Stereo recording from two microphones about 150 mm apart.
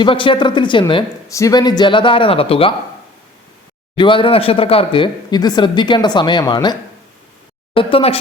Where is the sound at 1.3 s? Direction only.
20° left (ahead or behind); by 2.7 s 40° left (ahead or behind).